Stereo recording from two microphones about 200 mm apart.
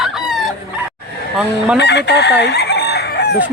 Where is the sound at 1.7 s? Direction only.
55° left (ahead or behind).